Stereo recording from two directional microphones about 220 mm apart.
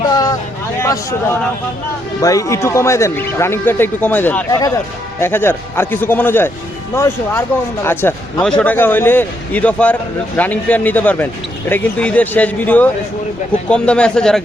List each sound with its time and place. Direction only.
0.1 s vehicle: 15° left (ahead or behind)
0.8 s speech: 10° left (ahead or behind)